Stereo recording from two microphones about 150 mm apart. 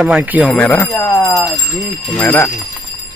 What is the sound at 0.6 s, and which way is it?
Speech, 10° left (ahead or behind).